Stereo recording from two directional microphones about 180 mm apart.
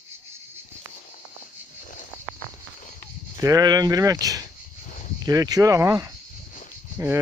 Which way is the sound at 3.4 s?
20° right (ahead or behind).